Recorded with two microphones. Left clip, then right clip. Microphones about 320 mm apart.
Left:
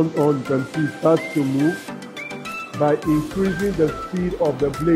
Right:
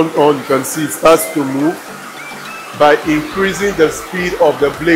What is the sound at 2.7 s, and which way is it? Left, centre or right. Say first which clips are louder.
A man's voice: right 9 dB; centre.